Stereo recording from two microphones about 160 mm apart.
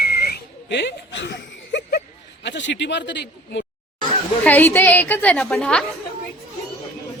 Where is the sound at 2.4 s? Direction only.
90° left.